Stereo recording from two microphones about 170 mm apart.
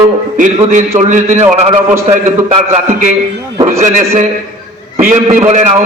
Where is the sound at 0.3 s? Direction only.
50° right (ahead or behind).